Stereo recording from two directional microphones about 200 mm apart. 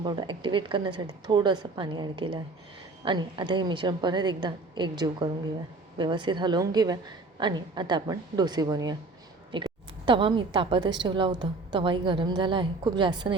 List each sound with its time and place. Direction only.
0.0 s a woman's voice: 20° right (ahead or behind)